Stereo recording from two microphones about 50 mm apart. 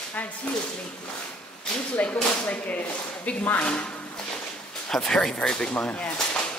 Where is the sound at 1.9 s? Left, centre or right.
Left.